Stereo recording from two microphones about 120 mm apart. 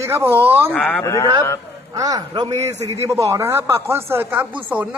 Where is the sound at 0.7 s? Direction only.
10° left (ahead or behind).